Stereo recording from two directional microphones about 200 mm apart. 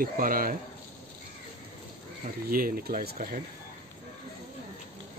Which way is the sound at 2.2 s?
45° right (ahead or behind).